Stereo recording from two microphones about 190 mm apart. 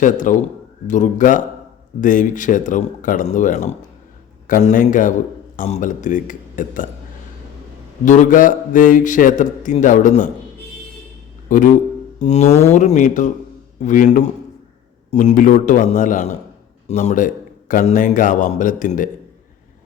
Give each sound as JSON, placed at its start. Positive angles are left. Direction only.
{"t": 0.0, "sound": "a man's voice", "side_deg": 45}
{"t": 8.0, "sound": "a man's voice", "side_deg": 40}
{"t": 11.4, "sound": "a man's voice", "side_deg": 45}